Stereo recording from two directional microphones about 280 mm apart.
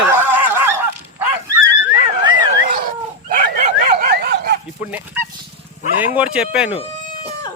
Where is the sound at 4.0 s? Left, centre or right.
Right.